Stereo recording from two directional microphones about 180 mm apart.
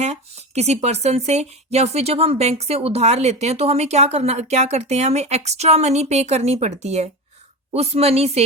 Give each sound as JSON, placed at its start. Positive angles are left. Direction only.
{"t": 0.0, "sound": "speech", "side_deg": -35}